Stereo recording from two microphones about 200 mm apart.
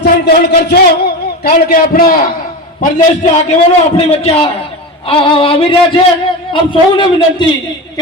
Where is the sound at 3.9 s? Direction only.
30° left (ahead or behind).